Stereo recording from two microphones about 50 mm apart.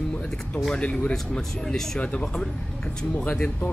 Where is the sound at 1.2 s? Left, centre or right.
Centre.